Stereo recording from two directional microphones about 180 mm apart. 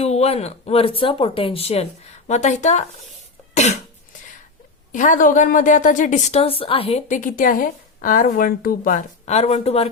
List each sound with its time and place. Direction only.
0.0 s speech: 35° left (ahead or behind)
3.5 s cough: 40° left (ahead or behind)
4.9 s a woman's voice: 45° left (ahead or behind)
7.1 s a woman's voice: 50° left (ahead or behind)